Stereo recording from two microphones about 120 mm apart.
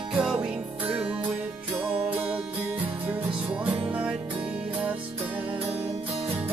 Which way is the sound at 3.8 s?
10° right (ahead or behind).